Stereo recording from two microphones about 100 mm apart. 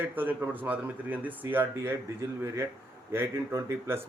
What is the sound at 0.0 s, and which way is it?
Speech, 20° right (ahead or behind).